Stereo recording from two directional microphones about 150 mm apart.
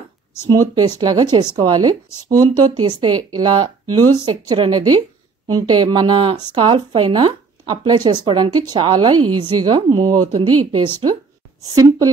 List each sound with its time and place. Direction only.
0.5 s speech: 25° right (ahead or behind)